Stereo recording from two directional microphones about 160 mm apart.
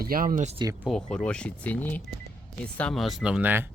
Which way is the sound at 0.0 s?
65° right (ahead or behind).